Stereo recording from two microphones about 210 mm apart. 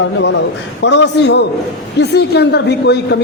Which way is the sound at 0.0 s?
60° left (ahead or behind).